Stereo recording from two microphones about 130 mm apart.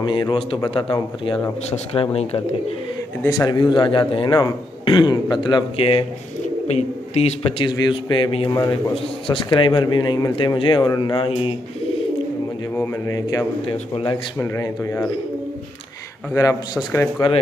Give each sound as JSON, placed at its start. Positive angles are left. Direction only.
{"t": 0.0, "sound": "a man's voice", "side_deg": 40}
{"t": 1.9, "sound": "a man's voice", "side_deg": 45}
{"t": 3.2, "sound": "a man's voice", "side_deg": 30}
{"t": 6.7, "sound": "speech", "side_deg": 55}
{"t": 7.6, "sound": "a man's voice", "side_deg": 35}
{"t": 8.5, "sound": "a man's voice", "side_deg": 30}
{"t": 12.7, "sound": "a man's voice", "side_deg": 20}
{"t": 13.7, "sound": "a man's voice", "side_deg": 45}
{"t": 14.4, "sound": "a man's voice", "side_deg": 20}
{"t": 17.2, "sound": "a man's voice", "side_deg": 30}